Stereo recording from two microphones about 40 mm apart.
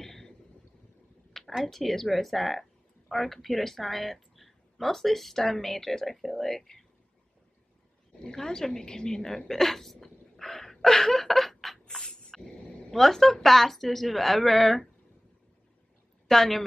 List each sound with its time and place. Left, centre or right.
0.0 s vehicle: centre
1.6 s speech: centre
8.2 s a woman's voice: centre
12.0 s a sound: centre
12.9 s speech: centre
16.3 s a woman's voice: centre